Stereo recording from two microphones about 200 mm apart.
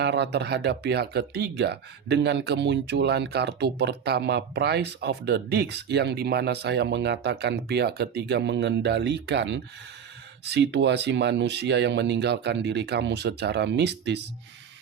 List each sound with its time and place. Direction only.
0.0 s speech: 55° right (ahead or behind)